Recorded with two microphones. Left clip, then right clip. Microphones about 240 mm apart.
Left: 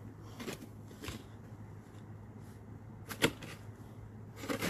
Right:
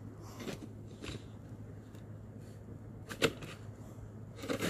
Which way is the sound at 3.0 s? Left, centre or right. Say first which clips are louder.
Even; centre.